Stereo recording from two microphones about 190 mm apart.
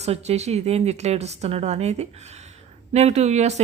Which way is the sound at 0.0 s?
35° right (ahead or behind).